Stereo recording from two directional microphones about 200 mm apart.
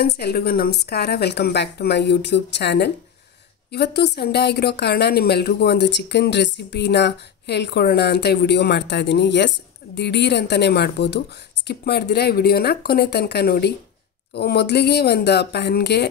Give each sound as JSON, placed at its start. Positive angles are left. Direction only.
{"t": 0.0, "sound": "a woman's voice", "side_deg": 50}